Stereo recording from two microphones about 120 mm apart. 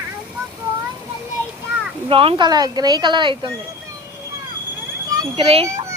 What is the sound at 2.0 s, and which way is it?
Speech, 50° right (ahead or behind).